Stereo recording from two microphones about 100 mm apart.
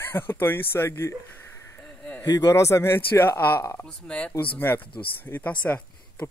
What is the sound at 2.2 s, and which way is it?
Speech, 40° left (ahead or behind).